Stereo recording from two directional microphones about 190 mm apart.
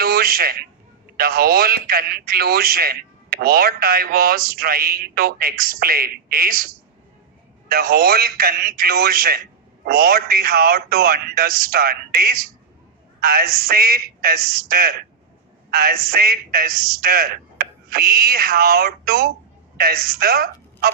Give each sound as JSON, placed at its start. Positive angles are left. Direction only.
{"t": 0.0, "sound": "a sound", "side_deg": -50}
{"t": 1.1, "sound": "speech", "side_deg": -50}
{"t": 7.7, "sound": "a woman's voice", "side_deg": -50}